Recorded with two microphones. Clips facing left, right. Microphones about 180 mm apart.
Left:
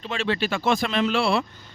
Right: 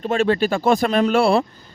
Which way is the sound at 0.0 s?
50° right (ahead or behind).